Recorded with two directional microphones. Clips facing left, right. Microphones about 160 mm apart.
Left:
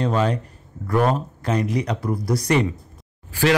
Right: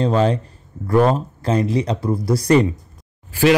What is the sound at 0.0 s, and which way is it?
A man's voice, 30° right (ahead or behind).